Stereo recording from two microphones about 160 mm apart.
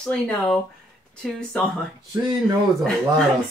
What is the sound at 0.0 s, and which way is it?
Speech, 5° left (ahead or behind).